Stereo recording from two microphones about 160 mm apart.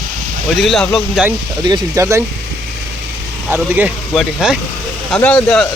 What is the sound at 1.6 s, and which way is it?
Speech, 25° right (ahead or behind).